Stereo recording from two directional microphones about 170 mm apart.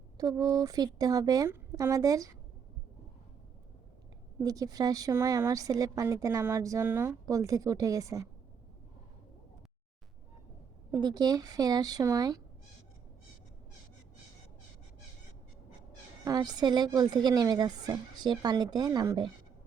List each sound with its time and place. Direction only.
0.2 s a woman's voice: 25° right (ahead or behind)
4.4 s a woman's voice: 20° right (ahead or behind)
11.0 s a woman's voice: 20° right (ahead or behind)
16.2 s a woman's voice: 25° right (ahead or behind)